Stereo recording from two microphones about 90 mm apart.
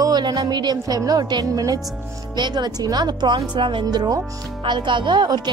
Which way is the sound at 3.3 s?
65° right (ahead or behind).